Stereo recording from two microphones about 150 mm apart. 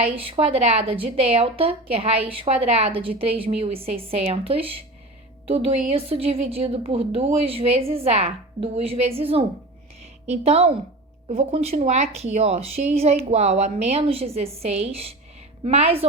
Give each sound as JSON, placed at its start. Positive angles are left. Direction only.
{"t": 0.3, "sound": "a woman's voice", "side_deg": -45}